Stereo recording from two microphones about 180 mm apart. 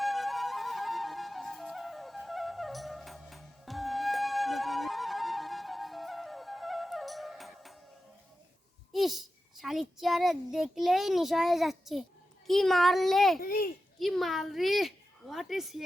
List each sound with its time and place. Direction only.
0.0 s music: centre (ahead or behind)
8.9 s a child's voice: centre (ahead or behind)
13.4 s a child's voice: 55° left (ahead or behind)
14.0 s a woman's voice: centre (ahead or behind)